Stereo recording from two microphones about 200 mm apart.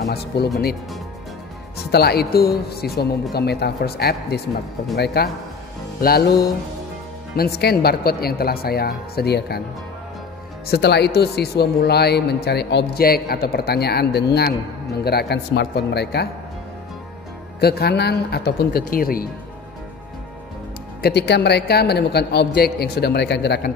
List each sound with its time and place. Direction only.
0.0 s speech: 55° left (ahead or behind)
1.9 s speech: 50° left (ahead or behind)
10.7 s a man's voice: 55° left (ahead or behind)
17.6 s speech: 55° left (ahead or behind)
21.0 s a man's voice: 55° left (ahead or behind)